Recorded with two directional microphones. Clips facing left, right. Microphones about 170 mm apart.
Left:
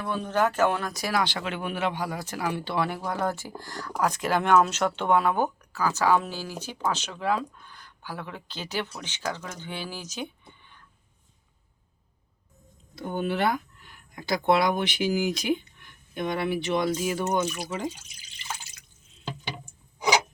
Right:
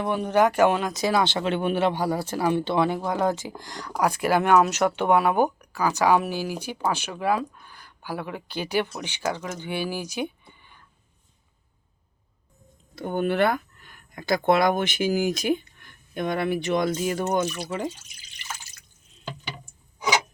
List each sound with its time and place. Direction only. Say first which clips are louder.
0.0 s speech: right 5 dB; 15° right (ahead or behind)
13.0 s speech: right 4 dB; 55° right (ahead or behind)